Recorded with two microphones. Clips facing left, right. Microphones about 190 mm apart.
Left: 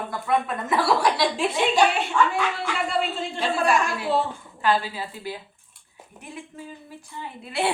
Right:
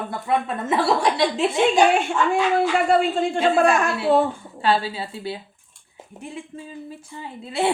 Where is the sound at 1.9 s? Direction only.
50° right (ahead or behind).